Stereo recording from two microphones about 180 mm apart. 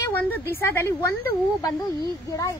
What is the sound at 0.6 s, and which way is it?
Speech, 15° left (ahead or behind).